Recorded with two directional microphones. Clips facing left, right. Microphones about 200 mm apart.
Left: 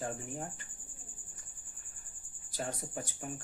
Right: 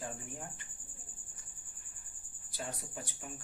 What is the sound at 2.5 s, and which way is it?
Speech, 45° left (ahead or behind).